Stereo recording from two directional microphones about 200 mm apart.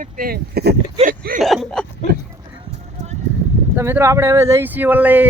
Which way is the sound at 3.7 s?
10° right (ahead or behind).